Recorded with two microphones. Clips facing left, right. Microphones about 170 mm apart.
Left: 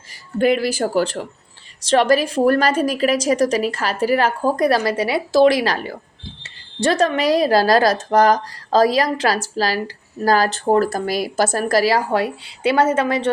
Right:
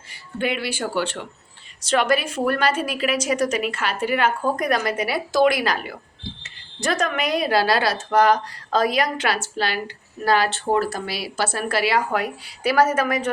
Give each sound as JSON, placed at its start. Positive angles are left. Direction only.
{"t": 0.1, "sound": "a woman's voice", "side_deg": 40}